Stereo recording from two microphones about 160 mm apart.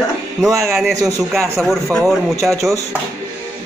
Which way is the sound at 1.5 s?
Centre (ahead or behind).